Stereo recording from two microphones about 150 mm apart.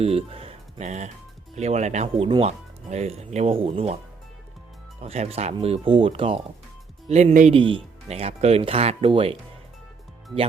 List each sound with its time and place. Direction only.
0.0 s speech: 40° right (ahead or behind)
4.9 s speech: 45° right (ahead or behind)